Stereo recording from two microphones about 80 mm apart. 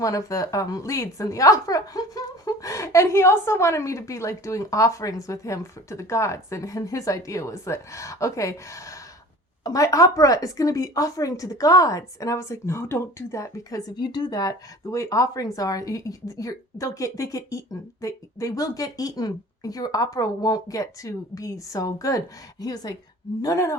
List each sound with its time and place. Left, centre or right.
0.0 s a woman's voice: left
14.0 s a woman's voice: left
23.4 s speech: left